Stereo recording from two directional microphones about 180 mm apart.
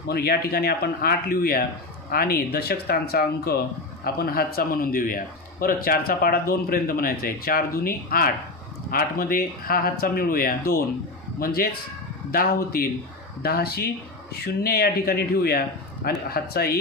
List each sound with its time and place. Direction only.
0.1 s a man's voice: 60° left (ahead or behind)